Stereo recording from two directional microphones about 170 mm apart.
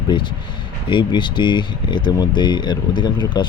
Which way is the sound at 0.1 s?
30° left (ahead or behind).